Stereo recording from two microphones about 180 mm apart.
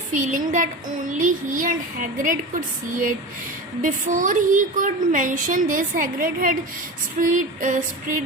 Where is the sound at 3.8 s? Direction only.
45° right (ahead or behind).